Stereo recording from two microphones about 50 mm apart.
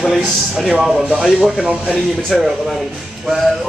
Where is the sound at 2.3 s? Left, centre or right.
Centre.